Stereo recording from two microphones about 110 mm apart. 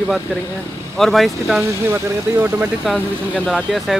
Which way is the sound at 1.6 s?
25° right (ahead or behind).